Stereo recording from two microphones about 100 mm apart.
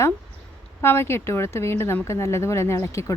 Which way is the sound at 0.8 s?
25° left (ahead or behind).